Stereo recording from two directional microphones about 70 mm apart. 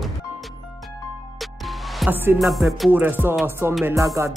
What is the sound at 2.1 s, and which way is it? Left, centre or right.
Speech, right.